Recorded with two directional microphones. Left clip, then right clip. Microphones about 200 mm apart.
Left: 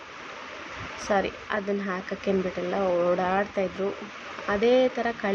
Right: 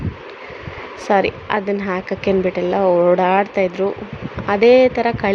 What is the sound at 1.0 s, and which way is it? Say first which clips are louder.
A woman's voice: right 10 dB; 30° right (ahead or behind).